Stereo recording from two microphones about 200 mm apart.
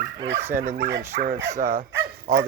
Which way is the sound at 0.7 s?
55° right (ahead or behind).